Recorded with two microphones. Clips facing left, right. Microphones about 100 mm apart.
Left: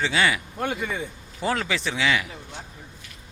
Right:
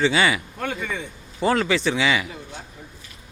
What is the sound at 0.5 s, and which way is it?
Speech, 20° left (ahead or behind).